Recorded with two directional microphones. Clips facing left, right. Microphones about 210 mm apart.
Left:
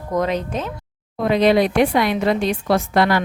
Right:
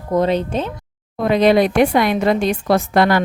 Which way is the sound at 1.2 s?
50° right (ahead or behind).